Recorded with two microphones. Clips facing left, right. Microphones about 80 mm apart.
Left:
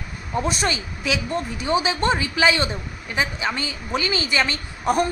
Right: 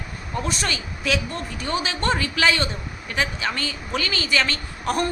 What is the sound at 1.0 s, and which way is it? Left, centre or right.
A woman's voice, centre.